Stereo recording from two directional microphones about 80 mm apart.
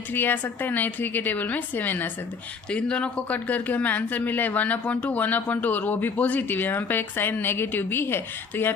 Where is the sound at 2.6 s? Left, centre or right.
Centre.